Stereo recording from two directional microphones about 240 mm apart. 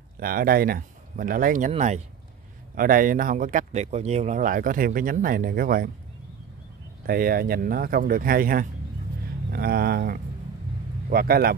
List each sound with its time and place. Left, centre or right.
0.2 s speech: right
7.1 s speech: right